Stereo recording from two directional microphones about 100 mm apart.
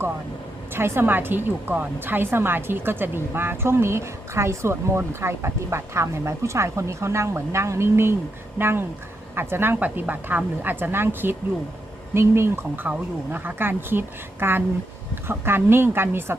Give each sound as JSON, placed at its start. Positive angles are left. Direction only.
{"t": 0.7, "sound": "speech", "side_deg": -25}